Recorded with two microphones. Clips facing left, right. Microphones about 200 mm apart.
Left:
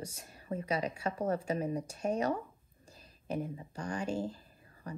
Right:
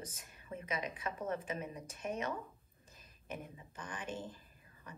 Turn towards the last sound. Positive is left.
turn(degrees=30)  # may be behind; listen again after turning